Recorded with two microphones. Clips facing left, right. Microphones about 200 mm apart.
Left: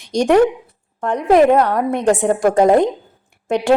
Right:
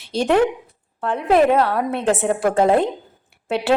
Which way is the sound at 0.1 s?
15° left (ahead or behind).